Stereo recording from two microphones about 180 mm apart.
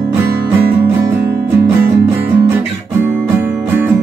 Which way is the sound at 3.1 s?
10° right (ahead or behind).